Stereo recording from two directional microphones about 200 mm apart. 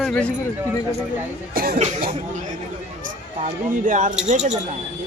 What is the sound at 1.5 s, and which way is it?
Speech, 45° right (ahead or behind).